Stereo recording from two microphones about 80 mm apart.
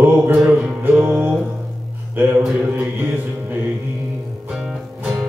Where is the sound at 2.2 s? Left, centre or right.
Right.